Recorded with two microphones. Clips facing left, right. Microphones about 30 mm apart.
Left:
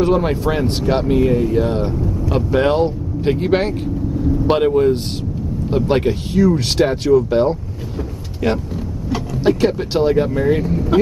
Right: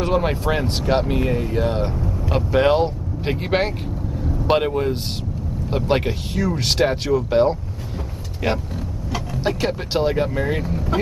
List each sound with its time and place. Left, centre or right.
0.0 s speech: centre